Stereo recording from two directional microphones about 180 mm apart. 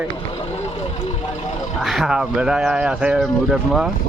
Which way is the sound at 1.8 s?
Centre (ahead or behind).